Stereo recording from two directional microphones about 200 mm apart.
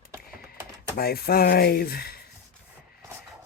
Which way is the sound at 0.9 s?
50° left (ahead or behind).